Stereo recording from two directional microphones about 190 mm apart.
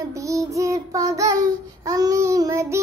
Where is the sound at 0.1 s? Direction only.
15° right (ahead or behind).